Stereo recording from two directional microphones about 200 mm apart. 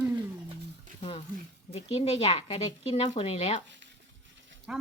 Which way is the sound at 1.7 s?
30° left (ahead or behind).